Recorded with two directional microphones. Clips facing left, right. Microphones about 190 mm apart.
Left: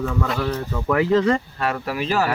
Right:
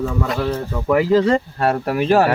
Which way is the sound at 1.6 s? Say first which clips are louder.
Right 6 dB; 45° right (ahead or behind).